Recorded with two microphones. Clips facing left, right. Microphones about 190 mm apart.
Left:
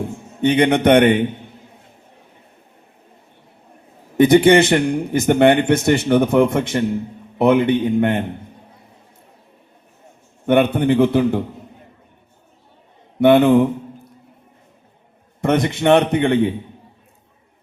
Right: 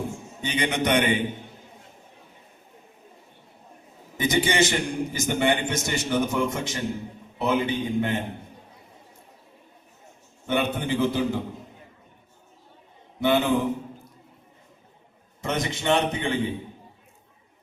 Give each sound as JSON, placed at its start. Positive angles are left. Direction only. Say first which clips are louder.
{"t": 0.4, "sound": "a man's voice", "louder": "left 11 dB", "side_deg": 60}
{"t": 4.2, "sound": "a man's voice", "louder": "left 12 dB", "side_deg": 60}
{"t": 10.4, "sound": "a man's voice", "louder": "left 11 dB", "side_deg": 60}
{"t": 13.1, "sound": "a man's voice", "louder": "left 10 dB", "side_deg": 60}
{"t": 15.4, "sound": "a man's voice", "louder": "left 10 dB", "side_deg": 60}